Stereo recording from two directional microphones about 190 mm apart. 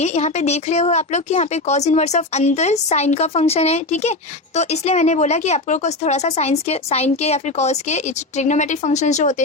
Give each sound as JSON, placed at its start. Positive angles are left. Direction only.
{"t": 0.0, "sound": "speech", "side_deg": 35}